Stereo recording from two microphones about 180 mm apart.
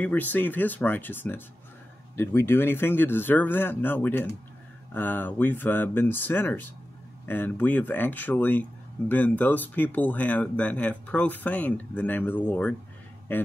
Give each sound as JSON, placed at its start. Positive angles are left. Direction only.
{"t": 0.0, "sound": "speech", "side_deg": 10}